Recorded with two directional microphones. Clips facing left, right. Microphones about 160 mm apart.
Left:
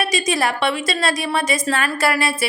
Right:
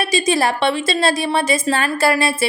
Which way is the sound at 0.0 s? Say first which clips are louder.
Right 3 dB; 30° right (ahead or behind).